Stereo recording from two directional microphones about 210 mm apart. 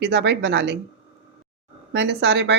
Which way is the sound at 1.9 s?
55° right (ahead or behind).